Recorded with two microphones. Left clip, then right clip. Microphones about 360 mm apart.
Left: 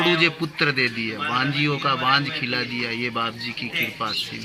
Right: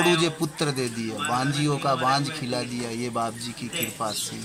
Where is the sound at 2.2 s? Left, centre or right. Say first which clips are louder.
Left 4 dB; centre.